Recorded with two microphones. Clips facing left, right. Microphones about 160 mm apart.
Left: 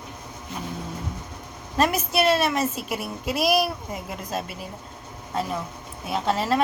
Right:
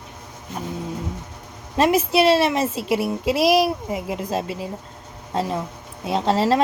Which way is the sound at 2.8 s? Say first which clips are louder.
Right 9 dB; 90° right.